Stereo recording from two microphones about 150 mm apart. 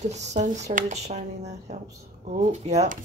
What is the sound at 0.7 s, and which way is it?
Speech, 50° right (ahead or behind).